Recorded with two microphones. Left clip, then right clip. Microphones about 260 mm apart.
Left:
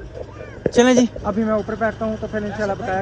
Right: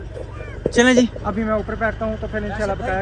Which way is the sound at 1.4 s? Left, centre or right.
Centre.